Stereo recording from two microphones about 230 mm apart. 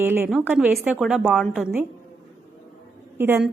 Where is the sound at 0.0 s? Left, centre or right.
Centre.